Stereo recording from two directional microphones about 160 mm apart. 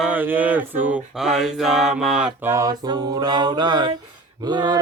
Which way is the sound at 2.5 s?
25° right (ahead or behind).